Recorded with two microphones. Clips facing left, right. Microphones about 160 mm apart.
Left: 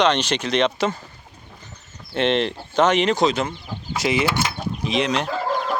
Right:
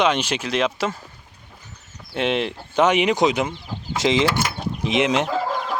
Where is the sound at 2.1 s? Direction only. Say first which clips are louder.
Left 2 dB; 5° right (ahead or behind).